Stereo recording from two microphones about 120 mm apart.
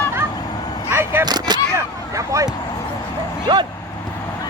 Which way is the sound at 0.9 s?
20° right (ahead or behind).